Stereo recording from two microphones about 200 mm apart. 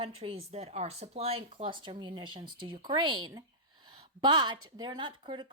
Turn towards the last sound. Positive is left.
turn(degrees=-25)  # may be behind; listen again after turning